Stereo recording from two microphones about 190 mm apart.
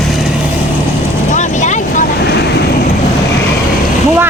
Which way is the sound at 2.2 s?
60° left (ahead or behind).